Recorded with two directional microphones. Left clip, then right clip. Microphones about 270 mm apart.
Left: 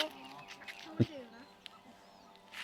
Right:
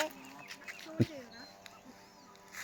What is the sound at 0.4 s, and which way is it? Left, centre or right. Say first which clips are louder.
Duck: right 2 dB; right.